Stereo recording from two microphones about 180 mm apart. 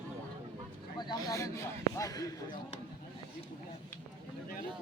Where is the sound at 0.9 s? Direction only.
25° left (ahead or behind).